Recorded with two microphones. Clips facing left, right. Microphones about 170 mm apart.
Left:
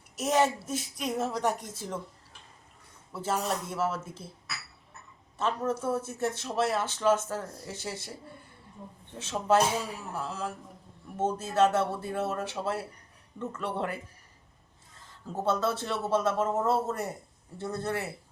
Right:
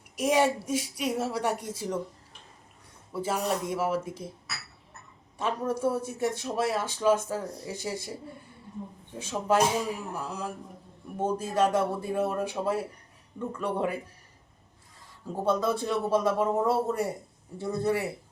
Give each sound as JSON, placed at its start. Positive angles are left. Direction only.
{"t": 0.2, "sound": "speech", "side_deg": -10}
{"t": 3.1, "sound": "speech", "side_deg": -10}
{"t": 5.4, "sound": "speech", "side_deg": -10}
{"t": 9.1, "sound": "speech", "side_deg": -10}
{"t": 15.4, "sound": "speech", "side_deg": -15}